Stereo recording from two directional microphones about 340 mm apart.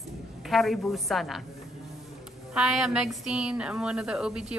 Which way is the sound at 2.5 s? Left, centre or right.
Centre.